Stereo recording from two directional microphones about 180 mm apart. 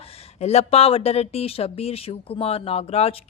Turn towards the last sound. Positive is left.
turn(degrees=35)  # may be behind; listen again after turning